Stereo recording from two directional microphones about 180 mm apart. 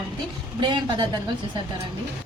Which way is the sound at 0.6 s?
25° right (ahead or behind).